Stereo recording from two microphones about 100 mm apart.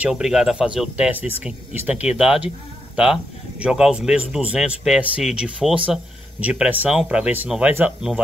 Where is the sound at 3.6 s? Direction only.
10° right (ahead or behind).